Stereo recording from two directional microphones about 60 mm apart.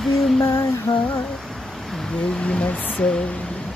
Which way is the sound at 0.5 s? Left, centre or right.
Left.